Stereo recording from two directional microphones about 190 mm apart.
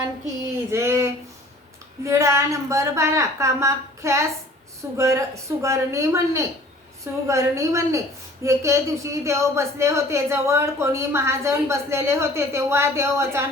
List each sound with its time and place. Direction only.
0.7 s speech: 15° right (ahead or behind)